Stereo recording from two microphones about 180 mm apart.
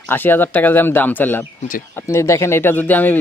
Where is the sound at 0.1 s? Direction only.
10° left (ahead or behind).